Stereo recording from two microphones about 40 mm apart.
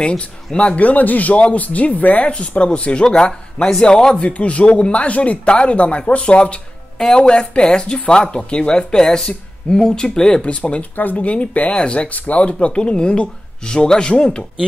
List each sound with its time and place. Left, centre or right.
0.6 s speech: left
2.2 s speech: left
4.3 s speech: left
7.0 s speech: centre
10.5 s speech: left
11.7 s speech: left